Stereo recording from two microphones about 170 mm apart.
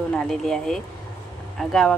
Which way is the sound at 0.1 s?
Centre (ahead or behind).